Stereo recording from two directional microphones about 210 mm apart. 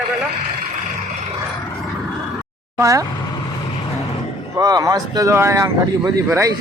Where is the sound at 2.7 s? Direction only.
15° right (ahead or behind).